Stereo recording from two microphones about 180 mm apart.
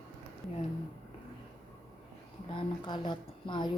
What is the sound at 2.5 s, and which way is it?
A woman's voice, 25° left (ahead or behind).